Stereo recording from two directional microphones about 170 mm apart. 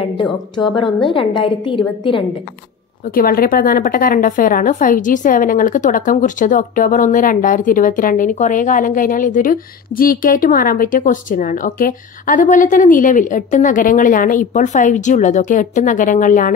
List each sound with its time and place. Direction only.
0.2 s a woman's voice: 30° left (ahead or behind)
3.2 s a woman's voice: 60° left (ahead or behind)